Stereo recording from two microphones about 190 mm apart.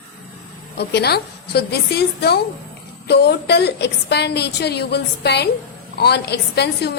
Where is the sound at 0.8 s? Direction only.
60° left (ahead or behind).